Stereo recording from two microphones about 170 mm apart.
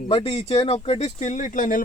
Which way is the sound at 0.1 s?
35° left (ahead or behind).